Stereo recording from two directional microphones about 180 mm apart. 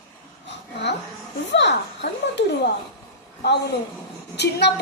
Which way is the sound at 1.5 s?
75° left (ahead or behind).